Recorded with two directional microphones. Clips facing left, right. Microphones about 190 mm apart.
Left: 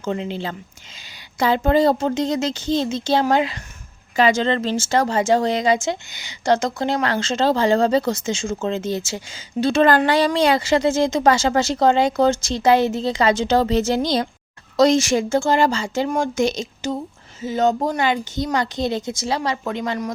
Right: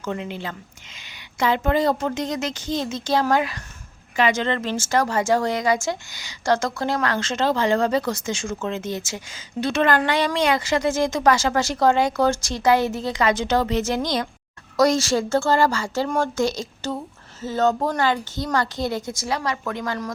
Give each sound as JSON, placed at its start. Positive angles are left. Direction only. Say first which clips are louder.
{"t": 0.0, "sound": "speech", "louder": "left 4 dB", "side_deg": 30}